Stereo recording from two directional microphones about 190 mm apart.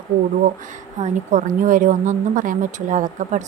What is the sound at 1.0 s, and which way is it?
A woman's voice, 45° right (ahead or behind).